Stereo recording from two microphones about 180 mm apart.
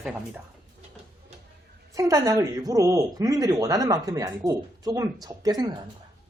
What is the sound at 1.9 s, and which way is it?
Speech, 15° right (ahead or behind).